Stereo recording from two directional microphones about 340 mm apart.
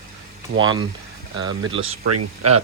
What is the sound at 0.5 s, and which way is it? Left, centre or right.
Speech, right.